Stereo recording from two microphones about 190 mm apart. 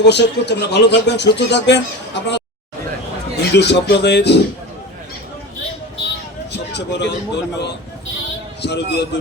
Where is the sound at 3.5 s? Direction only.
60° left (ahead or behind).